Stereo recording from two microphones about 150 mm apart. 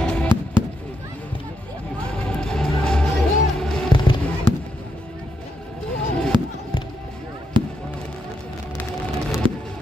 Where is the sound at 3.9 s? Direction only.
30° left (ahead or behind).